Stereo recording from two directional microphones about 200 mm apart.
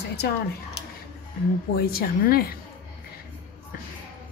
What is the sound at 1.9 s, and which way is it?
Speech, 50° left (ahead or behind).